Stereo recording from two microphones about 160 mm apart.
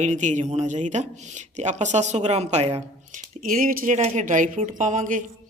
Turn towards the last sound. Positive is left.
turn(degrees=-55)  # may be behind; listen again after turning